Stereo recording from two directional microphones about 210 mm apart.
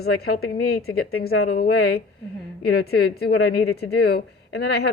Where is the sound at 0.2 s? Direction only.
45° left (ahead or behind).